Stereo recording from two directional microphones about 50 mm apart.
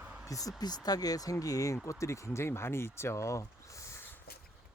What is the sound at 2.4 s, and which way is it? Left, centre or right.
Speech, left.